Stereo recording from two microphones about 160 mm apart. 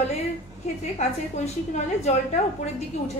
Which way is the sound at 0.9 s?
45° left (ahead or behind).